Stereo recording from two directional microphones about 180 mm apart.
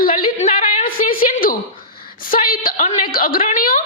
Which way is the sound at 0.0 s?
50° left (ahead or behind).